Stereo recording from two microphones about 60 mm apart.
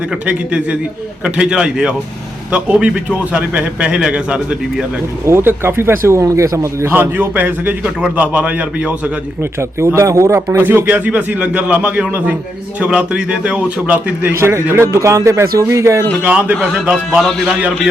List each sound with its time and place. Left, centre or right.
0.3 s a man's voice: right
5.2 s a man's voice: right
6.2 s speech: right
6.9 s a man's voice: right
9.4 s a man's voice: right
10.6 s a man's voice: right
14.3 s a man's voice: right
16.2 s a man's voice: right
17.2 s speech: centre